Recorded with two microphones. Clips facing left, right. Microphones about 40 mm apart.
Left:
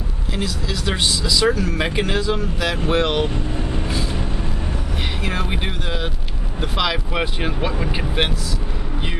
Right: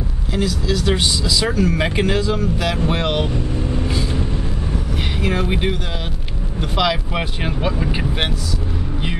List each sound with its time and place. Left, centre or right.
0.3 s speech: centre
3.8 s vehicle: centre
5.2 s speech: centre